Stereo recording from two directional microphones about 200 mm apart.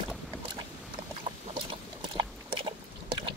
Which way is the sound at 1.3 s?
25° right (ahead or behind).